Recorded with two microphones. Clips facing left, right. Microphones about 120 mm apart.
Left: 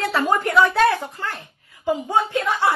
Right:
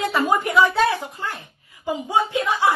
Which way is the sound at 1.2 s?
15° right (ahead or behind).